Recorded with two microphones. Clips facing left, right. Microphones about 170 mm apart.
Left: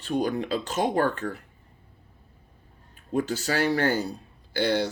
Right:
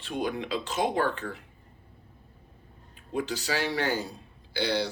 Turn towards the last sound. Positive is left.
turn(degrees=50)  # may be behind; listen again after turning